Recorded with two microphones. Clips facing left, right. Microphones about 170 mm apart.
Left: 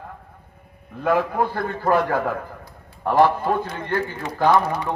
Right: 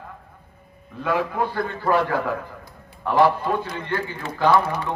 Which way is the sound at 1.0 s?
50° left (ahead or behind).